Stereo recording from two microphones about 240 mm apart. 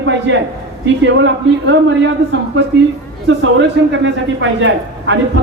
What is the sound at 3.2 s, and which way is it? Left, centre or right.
A man's voice, right.